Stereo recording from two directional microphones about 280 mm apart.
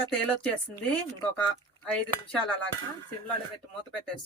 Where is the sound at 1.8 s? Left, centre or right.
Centre.